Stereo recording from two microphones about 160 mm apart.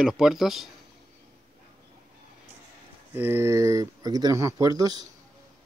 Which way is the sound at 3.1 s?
15° right (ahead or behind).